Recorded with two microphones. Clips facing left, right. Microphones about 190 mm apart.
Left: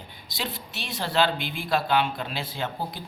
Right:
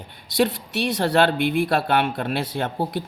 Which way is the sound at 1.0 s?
60° right (ahead or behind).